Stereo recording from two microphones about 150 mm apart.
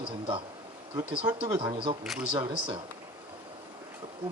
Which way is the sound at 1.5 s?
35° right (ahead or behind).